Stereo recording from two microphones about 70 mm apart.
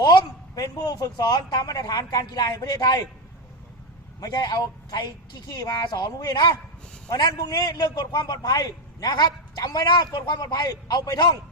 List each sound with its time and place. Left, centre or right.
0.0 s a sound: left
0.8 s a man's voice: left
4.2 s a man's voice: left